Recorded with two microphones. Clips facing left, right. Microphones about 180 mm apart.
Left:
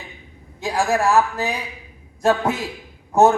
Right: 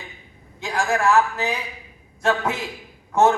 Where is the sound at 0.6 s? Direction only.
35° left (ahead or behind).